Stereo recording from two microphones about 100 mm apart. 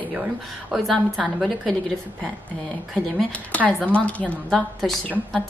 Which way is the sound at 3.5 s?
15° left (ahead or behind).